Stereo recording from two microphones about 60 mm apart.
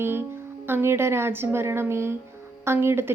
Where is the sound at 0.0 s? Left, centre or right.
Right.